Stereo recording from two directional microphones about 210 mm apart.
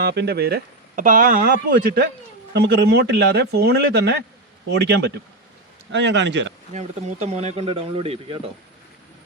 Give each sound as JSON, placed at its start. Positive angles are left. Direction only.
{"t": 0.0, "sound": "speech", "side_deg": -50}
{"t": 6.7, "sound": "speech", "side_deg": -30}